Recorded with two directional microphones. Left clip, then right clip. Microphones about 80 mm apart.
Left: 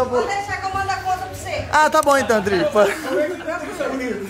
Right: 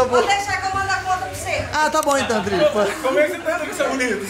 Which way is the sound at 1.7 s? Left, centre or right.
Left.